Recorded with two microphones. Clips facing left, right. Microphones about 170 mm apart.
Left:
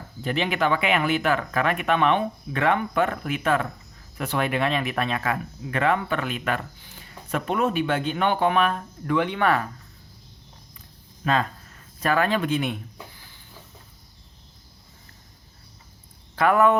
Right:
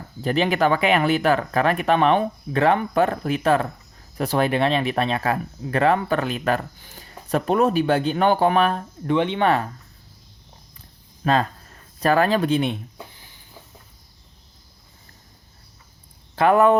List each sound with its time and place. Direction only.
0.2 s speech: 40° right (ahead or behind)
11.2 s speech: 35° right (ahead or behind)
16.3 s speech: 30° right (ahead or behind)